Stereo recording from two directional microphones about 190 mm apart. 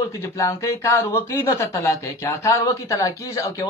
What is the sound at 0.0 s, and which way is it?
Speech, 15° left (ahead or behind).